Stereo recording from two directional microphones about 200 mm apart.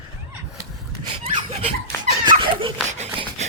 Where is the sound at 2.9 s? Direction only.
35° right (ahead or behind).